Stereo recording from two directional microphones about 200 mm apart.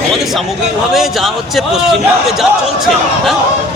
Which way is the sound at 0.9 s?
Centre (ahead or behind).